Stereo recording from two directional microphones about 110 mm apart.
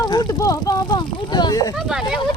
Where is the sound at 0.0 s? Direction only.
40° left (ahead or behind).